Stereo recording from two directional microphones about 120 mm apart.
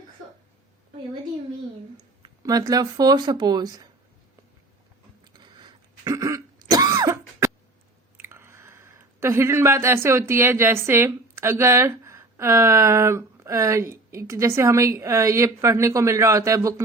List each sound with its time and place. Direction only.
2.4 s speech: 30° right (ahead or behind)
5.2 s a sound: 40° right (ahead or behind)
6.1 s throat clearing: 30° right (ahead or behind)
8.2 s speech: 20° right (ahead or behind)